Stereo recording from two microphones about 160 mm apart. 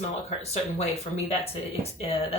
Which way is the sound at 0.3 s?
40° left (ahead or behind).